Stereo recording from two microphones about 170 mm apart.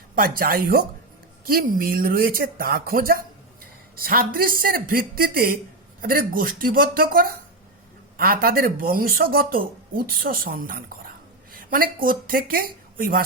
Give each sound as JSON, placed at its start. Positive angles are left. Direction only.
{"t": 0.2, "sound": "speech", "side_deg": -60}